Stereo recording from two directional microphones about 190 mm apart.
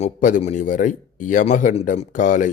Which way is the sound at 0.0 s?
45° left (ahead or behind).